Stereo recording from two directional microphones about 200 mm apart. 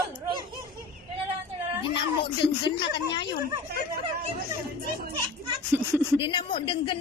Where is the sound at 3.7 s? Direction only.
50° right (ahead or behind).